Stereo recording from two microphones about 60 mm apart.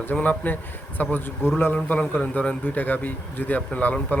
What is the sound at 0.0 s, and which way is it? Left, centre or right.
Speech, left.